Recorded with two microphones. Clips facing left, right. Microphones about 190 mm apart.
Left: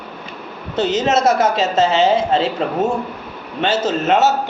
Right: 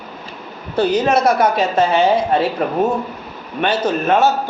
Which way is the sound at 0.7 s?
25° left (ahead or behind).